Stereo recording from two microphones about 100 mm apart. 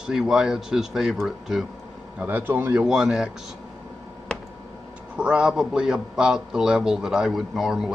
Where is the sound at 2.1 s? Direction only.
20° right (ahead or behind).